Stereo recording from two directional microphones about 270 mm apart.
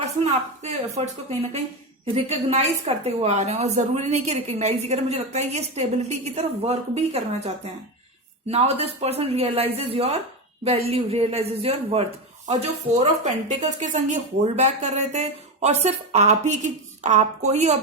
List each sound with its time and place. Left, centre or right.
0.0 s a woman's voice: right
2.1 s a woman's voice: right